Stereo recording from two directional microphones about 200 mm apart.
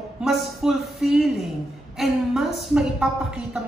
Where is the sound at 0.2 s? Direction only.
Centre (ahead or behind).